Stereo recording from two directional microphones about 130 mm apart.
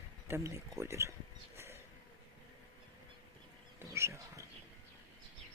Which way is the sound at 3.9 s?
20° right (ahead or behind).